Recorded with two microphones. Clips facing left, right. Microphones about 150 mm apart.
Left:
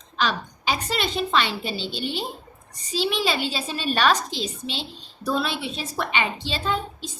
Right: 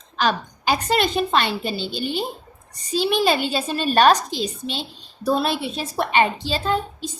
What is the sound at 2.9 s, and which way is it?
A woman's voice, 50° right (ahead or behind).